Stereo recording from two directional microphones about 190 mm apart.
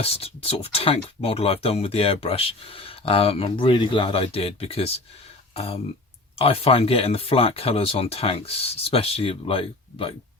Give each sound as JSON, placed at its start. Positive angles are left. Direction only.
{"t": 0.0, "sound": "speech", "side_deg": 30}